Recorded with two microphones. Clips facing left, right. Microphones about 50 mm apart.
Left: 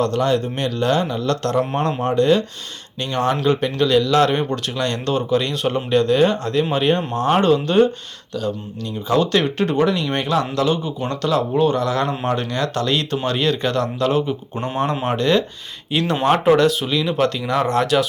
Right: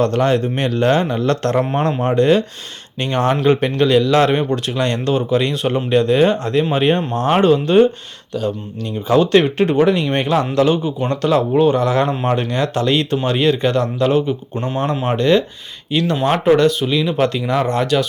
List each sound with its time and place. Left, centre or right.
0.0 s a man's voice: right
4.4 s speech: centre
4.8 s speech: right
9.0 s speech: right; by 15.4 s centre
15.9 s speech: centre